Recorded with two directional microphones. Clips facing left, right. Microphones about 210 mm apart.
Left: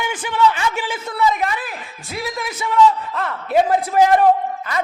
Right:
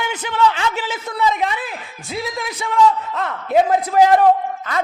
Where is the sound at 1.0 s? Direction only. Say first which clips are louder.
Even; 15° right (ahead or behind).